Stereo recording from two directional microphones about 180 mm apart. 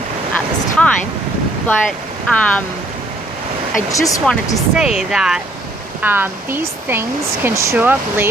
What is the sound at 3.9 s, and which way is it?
Speech, 20° left (ahead or behind).